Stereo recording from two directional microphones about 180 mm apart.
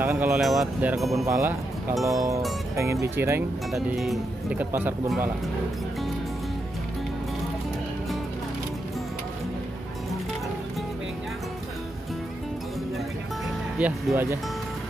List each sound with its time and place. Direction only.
0.0 s speech: 10° right (ahead or behind)
0.4 s speech: centre (ahead or behind)
1.2 s speech: 15° right (ahead or behind)
3.7 s speech: centre (ahead or behind)
13.7 s speech: 5° right (ahead or behind)